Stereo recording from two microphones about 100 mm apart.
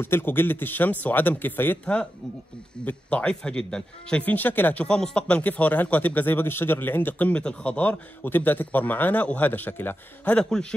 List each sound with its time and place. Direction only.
0.0 s a man's voice: 20° left (ahead or behind)